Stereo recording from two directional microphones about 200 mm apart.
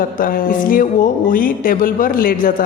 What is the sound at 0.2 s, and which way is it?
Speech, 45° left (ahead or behind).